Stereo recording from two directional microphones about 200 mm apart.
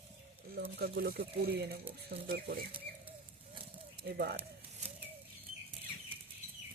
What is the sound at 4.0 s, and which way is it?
Speech, 50° right (ahead or behind).